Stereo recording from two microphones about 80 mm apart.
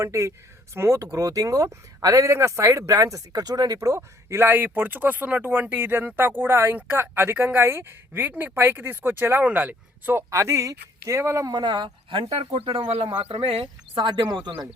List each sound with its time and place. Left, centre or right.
0.0 s speech: right
4.4 s speech: right
10.2 s speech: right
11.5 s speech: right
12.6 s speech: right